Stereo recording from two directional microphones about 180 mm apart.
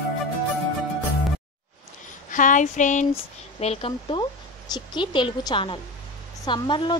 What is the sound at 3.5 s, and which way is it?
Speech, 35° left (ahead or behind).